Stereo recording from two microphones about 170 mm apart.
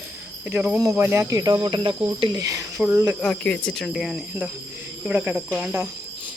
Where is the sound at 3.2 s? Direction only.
5° left (ahead or behind).